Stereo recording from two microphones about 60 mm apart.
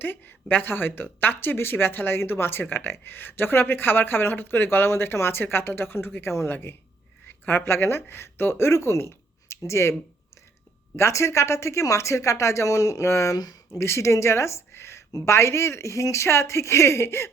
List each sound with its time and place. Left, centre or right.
0.0 s speech: left
10.9 s speech: left
13.3 s speech: left
13.7 s speech: left